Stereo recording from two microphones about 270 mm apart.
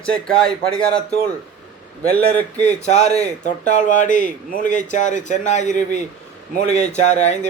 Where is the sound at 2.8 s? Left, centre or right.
Left.